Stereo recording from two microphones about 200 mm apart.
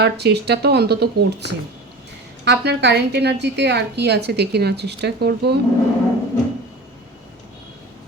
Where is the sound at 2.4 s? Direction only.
60° right (ahead or behind).